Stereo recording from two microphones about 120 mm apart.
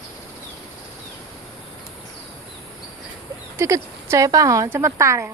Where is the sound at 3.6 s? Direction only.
25° right (ahead or behind).